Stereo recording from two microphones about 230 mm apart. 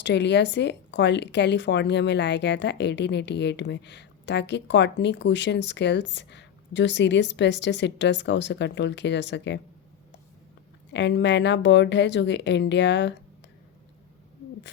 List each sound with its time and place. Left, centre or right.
0.0 s speech: left
10.9 s speech: left